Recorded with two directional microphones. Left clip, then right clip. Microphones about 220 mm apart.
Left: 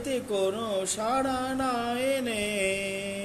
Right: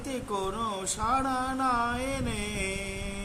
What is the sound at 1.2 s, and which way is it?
Music, 45° right (ahead or behind).